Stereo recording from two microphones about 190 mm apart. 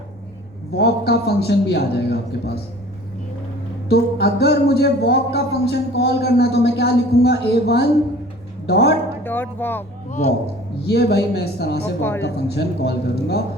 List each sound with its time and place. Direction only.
0.8 s speech: 60° left (ahead or behind)
3.8 s speech: 55° left (ahead or behind)
9.2 s speech: 10° left (ahead or behind)
10.1 s speech: 35° left (ahead or behind)
10.8 s speech: 60° left (ahead or behind)